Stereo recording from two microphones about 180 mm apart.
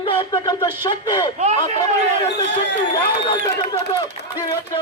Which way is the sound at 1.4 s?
35° right (ahead or behind).